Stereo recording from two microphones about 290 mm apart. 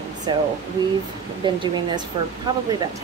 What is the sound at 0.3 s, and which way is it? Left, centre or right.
Speech, centre.